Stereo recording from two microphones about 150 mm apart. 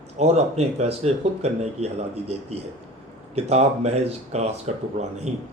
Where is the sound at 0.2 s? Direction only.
45° right (ahead or behind).